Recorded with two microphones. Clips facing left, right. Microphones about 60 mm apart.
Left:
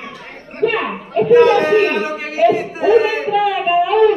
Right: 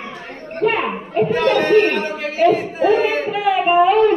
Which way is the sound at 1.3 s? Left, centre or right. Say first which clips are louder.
Left 7 dB; centre.